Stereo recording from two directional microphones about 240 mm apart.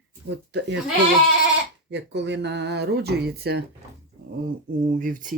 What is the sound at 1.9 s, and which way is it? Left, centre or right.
Speech, right.